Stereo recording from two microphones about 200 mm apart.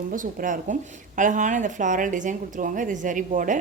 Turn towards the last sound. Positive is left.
turn(degrees=-40)  # may be behind; listen again after turning